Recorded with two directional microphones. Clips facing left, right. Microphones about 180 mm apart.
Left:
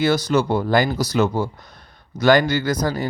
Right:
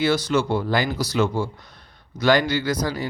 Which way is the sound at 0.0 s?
40° left (ahead or behind).